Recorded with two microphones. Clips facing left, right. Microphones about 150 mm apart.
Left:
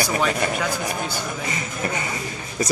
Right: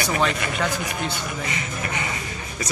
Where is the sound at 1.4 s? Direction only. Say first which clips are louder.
Left 2 dB; 40° left (ahead or behind).